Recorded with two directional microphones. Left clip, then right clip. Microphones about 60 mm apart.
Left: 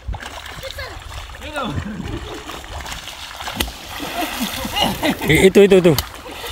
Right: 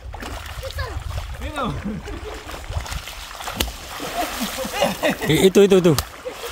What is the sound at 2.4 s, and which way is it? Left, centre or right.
Splash, centre.